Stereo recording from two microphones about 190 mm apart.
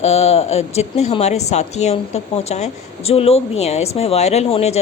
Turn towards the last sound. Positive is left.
turn(degrees=30)  # may be behind; listen again after turning